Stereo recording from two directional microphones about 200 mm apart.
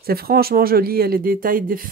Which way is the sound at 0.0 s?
50° right (ahead or behind).